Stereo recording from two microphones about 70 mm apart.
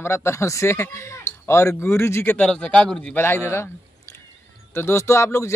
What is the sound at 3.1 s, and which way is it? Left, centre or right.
Speech, left.